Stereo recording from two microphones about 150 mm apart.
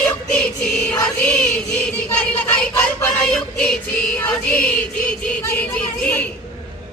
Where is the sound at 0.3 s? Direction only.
5° left (ahead or behind).